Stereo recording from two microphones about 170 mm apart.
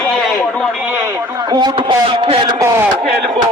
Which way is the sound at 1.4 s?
25° right (ahead or behind).